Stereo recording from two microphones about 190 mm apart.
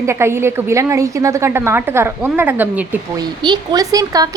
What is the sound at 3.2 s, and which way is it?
Speech, 25° right (ahead or behind).